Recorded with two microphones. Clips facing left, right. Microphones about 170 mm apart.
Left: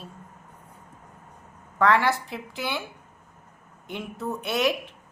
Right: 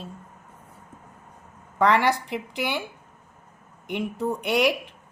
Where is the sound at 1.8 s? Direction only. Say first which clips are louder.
Right 1 dB; 15° right (ahead or behind).